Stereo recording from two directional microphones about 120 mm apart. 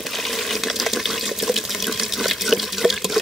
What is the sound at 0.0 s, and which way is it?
Water, centre (ahead or behind).